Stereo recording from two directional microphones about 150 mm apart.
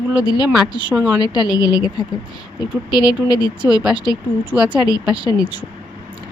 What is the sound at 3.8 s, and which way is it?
A woman's voice, 5° right (ahead or behind).